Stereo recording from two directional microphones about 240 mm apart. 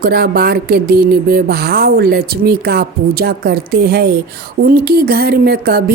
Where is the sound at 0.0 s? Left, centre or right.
Right.